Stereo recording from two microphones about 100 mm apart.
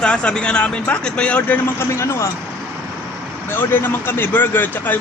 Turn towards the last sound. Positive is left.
turn(degrees=20)  # may be behind; listen again after turning